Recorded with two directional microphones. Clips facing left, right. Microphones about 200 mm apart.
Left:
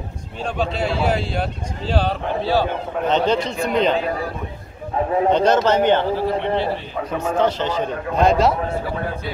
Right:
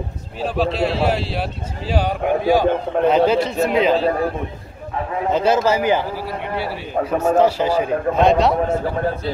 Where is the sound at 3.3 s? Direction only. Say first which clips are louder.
Right 2 dB; 5° right (ahead or behind).